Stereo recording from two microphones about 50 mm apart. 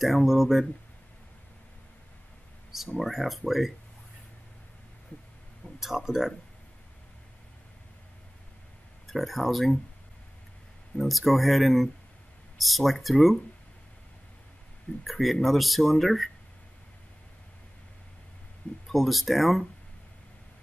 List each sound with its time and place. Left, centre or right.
0.0 s speech: centre
3.0 s speech: centre
5.8 s speech: centre
9.0 s speech: centre
11.0 s speech: centre
15.0 s speech: centre
18.9 s speech: centre